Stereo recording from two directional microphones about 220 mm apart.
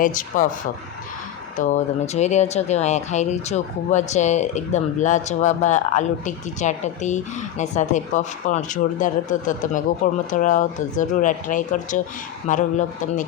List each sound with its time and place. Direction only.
0.0 s speech: 35° left (ahead or behind)